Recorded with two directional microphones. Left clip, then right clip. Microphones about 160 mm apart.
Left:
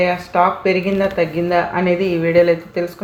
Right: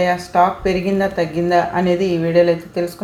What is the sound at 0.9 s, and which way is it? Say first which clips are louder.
Speech: left 1 dB; 5° left (ahead or behind).